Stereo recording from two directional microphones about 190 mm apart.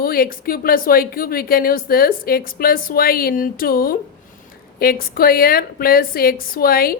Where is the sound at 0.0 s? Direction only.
50° left (ahead or behind).